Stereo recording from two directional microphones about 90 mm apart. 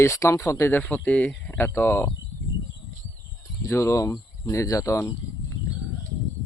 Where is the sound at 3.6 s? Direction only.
35° left (ahead or behind).